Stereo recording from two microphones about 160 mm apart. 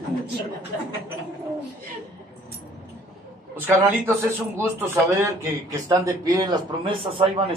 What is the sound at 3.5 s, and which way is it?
A man's voice, 15° right (ahead or behind).